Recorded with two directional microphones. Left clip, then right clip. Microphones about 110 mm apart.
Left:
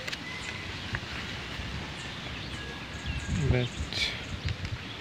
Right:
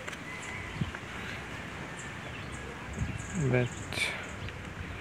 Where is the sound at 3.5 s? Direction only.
10° right (ahead or behind).